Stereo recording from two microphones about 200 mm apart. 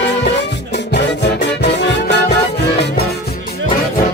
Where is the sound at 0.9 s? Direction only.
60° left (ahead or behind).